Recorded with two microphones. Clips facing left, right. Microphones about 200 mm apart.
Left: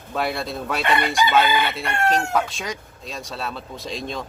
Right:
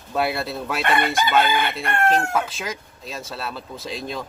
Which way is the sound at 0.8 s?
55° right (ahead or behind).